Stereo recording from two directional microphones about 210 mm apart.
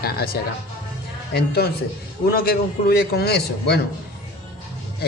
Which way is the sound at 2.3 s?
45° left (ahead or behind).